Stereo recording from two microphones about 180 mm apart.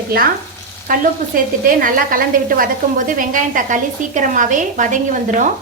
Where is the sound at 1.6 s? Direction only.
50° right (ahead or behind).